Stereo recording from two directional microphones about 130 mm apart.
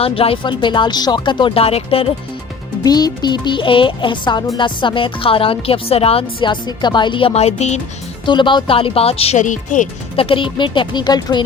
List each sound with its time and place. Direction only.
0.0 s speech: 45° left (ahead or behind)
2.8 s speech: 30° left (ahead or behind); by 7.8 s 55° left (ahead or behind)
8.2 s speech: 40° left (ahead or behind)
9.4 s speech: 75° left (ahead or behind)
10.2 s speech: 45° left (ahead or behind)